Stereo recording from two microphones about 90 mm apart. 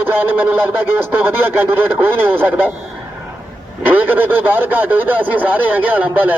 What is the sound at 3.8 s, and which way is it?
A man's voice, 20° right (ahead or behind).